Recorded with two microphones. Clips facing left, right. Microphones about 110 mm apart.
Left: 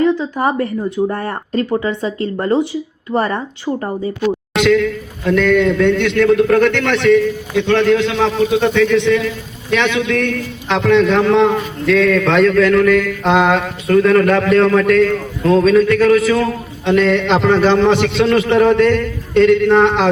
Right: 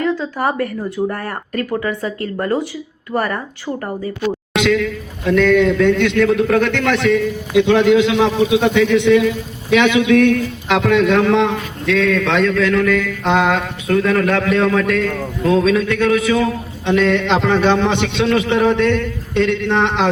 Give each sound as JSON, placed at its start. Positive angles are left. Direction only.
{"t": 0.0, "sound": "speech", "side_deg": 20}
{"t": 4.5, "sound": "a man's voice", "side_deg": 0}